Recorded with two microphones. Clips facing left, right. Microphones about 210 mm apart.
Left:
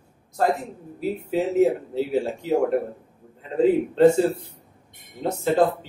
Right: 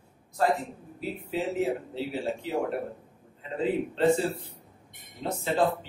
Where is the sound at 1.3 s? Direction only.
45° left (ahead or behind).